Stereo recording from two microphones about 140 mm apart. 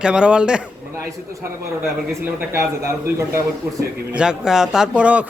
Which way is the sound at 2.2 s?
15° right (ahead or behind).